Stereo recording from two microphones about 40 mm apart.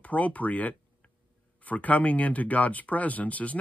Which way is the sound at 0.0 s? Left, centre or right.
Left.